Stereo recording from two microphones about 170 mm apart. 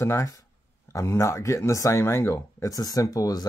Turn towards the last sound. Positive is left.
turn(degrees=20)  # may be behind; listen again after turning